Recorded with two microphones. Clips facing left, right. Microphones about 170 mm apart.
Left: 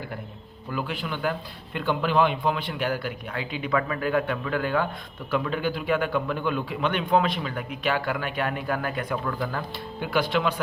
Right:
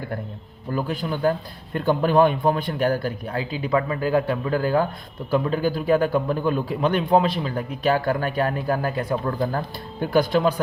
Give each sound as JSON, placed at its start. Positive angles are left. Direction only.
{"t": 0.7, "sound": "a man's voice", "side_deg": -40}